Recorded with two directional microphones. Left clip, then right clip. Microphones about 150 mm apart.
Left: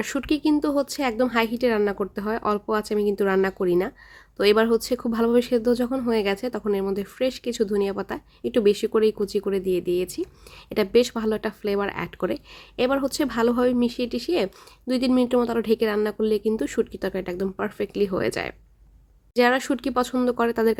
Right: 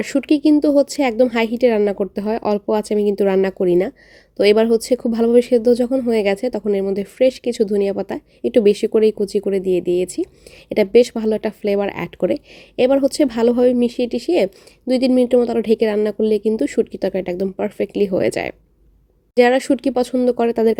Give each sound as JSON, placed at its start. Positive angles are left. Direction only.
{"t": 0.0, "sound": "a woman's voice", "side_deg": -15}